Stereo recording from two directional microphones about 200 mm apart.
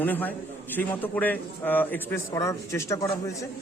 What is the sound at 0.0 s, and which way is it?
A man's voice, 10° left (ahead or behind).